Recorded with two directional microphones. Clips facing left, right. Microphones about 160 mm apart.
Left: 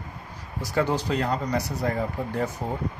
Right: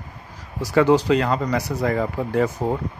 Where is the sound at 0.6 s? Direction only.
90° right.